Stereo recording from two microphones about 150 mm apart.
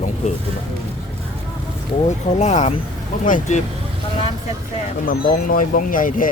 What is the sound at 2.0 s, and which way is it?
Speech, 50° left (ahead or behind).